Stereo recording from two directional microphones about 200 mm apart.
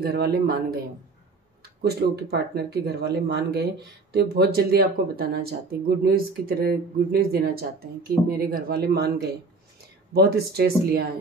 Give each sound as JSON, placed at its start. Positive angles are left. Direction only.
{"t": 0.0, "sound": "speech", "side_deg": -50}